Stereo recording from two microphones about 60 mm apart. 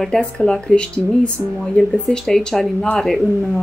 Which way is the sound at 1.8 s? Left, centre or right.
Centre.